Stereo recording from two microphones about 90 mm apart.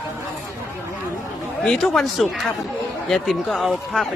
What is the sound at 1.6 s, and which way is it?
A man's voice, 5° left (ahead or behind).